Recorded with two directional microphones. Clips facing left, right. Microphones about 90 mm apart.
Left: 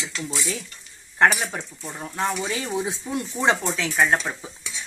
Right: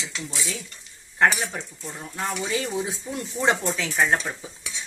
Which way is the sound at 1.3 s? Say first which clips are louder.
Left 2 dB; 25° left (ahead or behind).